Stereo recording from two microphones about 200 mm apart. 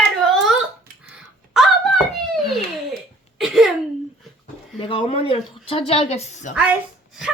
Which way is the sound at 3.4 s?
Centre (ahead or behind).